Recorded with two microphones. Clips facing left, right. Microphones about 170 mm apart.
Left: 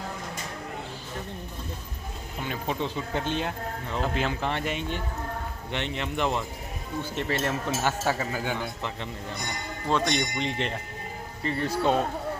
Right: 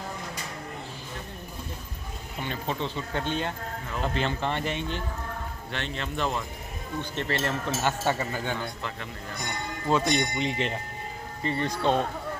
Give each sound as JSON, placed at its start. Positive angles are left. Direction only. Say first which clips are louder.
{"t": 2.4, "sound": "speech", "louder": "left 1 dB", "side_deg": 10}
{"t": 5.7, "sound": "speech", "louder": "left 3 dB", "side_deg": 20}
{"t": 7.0, "sound": "speech", "louder": "left 1 dB", "side_deg": 5}
{"t": 9.8, "sound": "speech", "louder": "right 1 dB", "side_deg": -5}